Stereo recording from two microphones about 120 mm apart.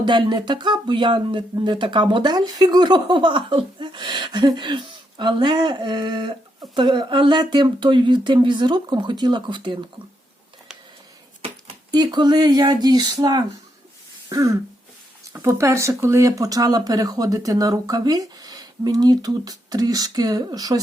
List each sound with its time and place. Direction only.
0.0 s speech: 40° right (ahead or behind)
11.9 s speech: 35° right (ahead or behind)
14.3 s throat clearing: 25° right (ahead or behind)
15.3 s speech: 25° right (ahead or behind)